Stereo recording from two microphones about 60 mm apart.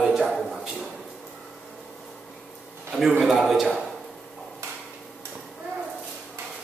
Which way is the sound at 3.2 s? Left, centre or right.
Centre.